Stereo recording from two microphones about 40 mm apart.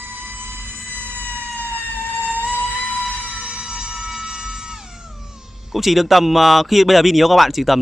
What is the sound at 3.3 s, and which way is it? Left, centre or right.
Train, centre.